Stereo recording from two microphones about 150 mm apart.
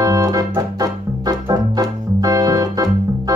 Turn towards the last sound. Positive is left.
turn(degrees=-25)  # may be behind; listen again after turning